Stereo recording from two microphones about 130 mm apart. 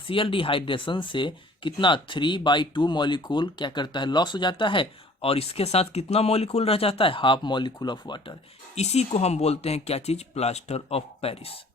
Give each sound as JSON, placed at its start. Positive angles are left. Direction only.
{"t": 0.1, "sound": "speech", "side_deg": 45}
{"t": 8.7, "sound": "speech", "side_deg": 55}